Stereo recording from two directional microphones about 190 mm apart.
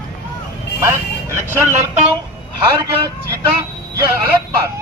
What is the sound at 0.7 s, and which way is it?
Speech, 15° right (ahead or behind).